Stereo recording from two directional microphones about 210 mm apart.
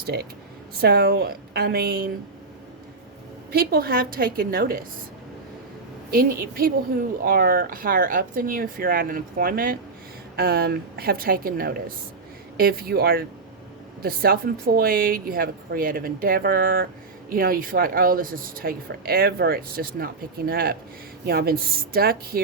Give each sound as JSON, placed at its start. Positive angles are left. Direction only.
{"t": 0.0, "sound": "speech", "side_deg": -50}
{"t": 3.5, "sound": "speech", "side_deg": -45}
{"t": 6.1, "sound": "speech", "side_deg": -45}